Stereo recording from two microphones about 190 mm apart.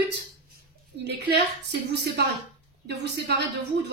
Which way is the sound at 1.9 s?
60° right (ahead or behind).